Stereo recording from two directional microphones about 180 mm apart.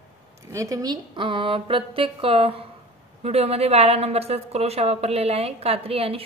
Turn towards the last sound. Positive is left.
turn(degrees=-30)  # may be behind; listen again after turning